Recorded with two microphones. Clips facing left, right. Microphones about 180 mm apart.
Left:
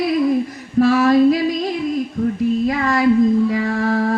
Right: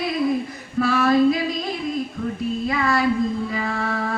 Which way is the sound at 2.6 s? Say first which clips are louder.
Left 4 dB; 40° left (ahead or behind).